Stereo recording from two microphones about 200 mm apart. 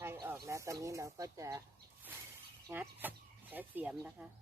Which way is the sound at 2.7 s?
10° right (ahead or behind).